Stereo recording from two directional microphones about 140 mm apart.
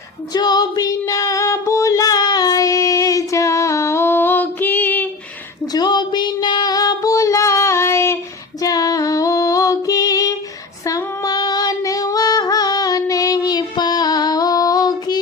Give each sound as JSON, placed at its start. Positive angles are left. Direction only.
{"t": 0.3, "sound": "female singing", "side_deg": 30}
{"t": 5.7, "sound": "female singing", "side_deg": 30}